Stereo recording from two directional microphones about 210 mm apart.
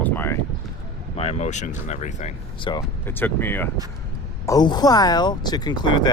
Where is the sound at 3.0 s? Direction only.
10° left (ahead or behind).